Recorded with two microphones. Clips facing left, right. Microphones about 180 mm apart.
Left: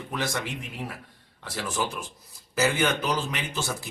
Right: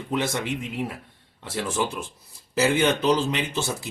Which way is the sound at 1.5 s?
25° right (ahead or behind).